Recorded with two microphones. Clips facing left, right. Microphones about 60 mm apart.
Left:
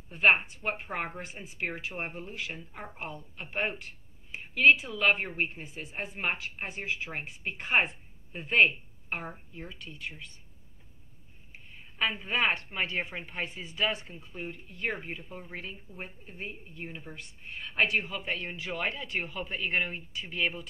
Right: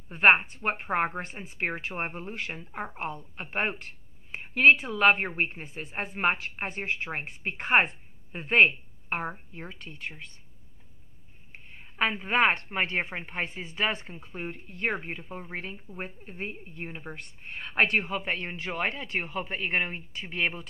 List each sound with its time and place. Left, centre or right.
0.1 s a woman's voice: right
12.0 s a woman's voice: right